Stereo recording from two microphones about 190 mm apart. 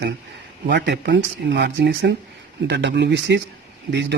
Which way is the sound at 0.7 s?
65° right (ahead or behind).